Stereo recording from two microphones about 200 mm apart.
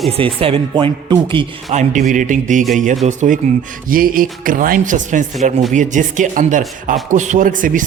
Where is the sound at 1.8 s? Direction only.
40° right (ahead or behind).